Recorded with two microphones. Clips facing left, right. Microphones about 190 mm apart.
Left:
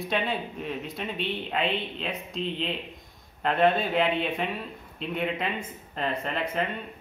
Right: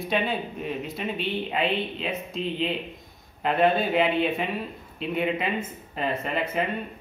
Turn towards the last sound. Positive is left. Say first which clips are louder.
# right 2 dB
turn(degrees=-5)  # may be behind; listen again after turning